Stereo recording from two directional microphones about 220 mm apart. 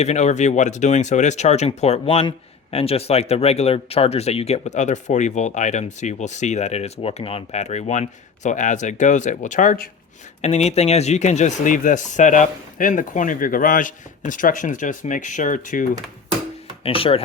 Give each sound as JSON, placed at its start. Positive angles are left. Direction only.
{"t": 0.0, "sound": "a man's voice", "side_deg": 30}
{"t": 10.4, "sound": "a man's voice", "side_deg": 30}
{"t": 16.8, "sound": "speech", "side_deg": 25}